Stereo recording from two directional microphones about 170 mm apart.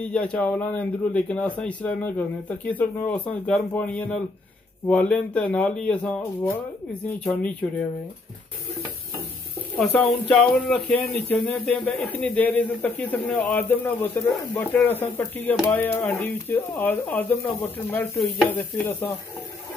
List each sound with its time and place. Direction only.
0.0 s a man's voice: 5° left (ahead or behind)
9.9 s a man's voice: 5° left (ahead or behind)